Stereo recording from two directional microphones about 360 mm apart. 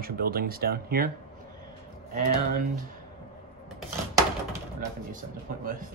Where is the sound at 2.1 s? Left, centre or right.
Right.